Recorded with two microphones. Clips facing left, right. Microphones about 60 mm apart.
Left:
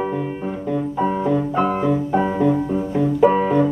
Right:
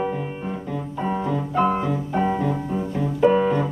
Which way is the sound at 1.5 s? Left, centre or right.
Centre.